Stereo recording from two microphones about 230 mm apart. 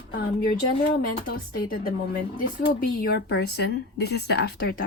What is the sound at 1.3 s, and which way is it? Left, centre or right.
A woman's voice, left.